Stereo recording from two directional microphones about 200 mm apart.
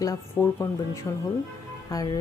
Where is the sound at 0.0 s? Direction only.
15° left (ahead or behind).